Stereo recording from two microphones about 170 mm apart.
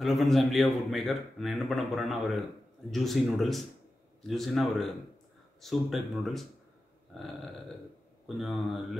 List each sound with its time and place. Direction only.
0.0 s a man's voice: centre (ahead or behind)
8.4 s a man's voice: centre (ahead or behind)